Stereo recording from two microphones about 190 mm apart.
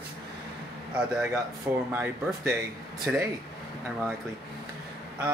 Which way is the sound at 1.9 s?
10° right (ahead or behind).